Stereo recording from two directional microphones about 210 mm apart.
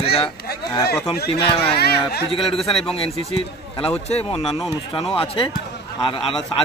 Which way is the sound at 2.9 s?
25° left (ahead or behind).